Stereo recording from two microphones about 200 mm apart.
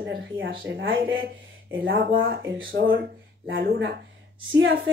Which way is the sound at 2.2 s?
70° right (ahead or behind).